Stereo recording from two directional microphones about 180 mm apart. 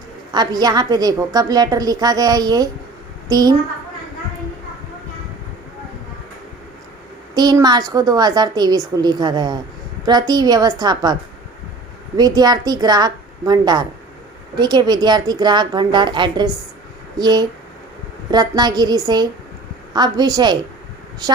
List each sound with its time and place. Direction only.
0.3 s a woman's voice: 20° right (ahead or behind)
7.3 s a woman's voice: 20° right (ahead or behind)